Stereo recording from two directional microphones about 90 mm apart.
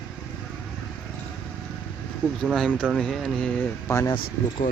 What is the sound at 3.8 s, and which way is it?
Speech, 35° left (ahead or behind).